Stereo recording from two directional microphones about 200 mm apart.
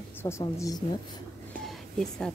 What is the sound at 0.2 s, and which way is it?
Speech, 15° left (ahead or behind).